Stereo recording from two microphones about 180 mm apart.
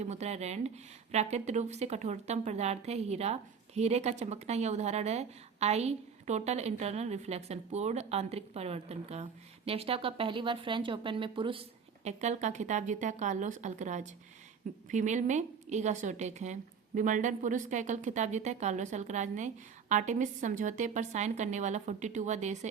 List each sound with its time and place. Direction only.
0.0 s a woman's voice: 40° right (ahead or behind)
12.0 s a woman's voice: 40° right (ahead or behind)